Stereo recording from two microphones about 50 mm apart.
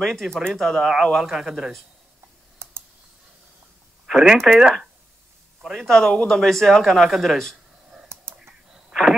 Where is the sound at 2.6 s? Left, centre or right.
Right.